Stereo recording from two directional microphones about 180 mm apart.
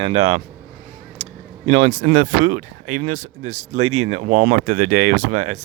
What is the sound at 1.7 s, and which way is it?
Speech, 45° right (ahead or behind).